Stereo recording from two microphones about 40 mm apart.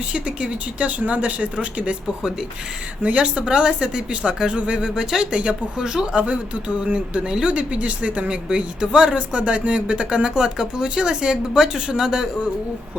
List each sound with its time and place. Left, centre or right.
0.1 s speech: right
3.0 s speech: right
5.3 s speech: right
5.8 s speech: centre
6.1 s speech: right
8.4 s speech: centre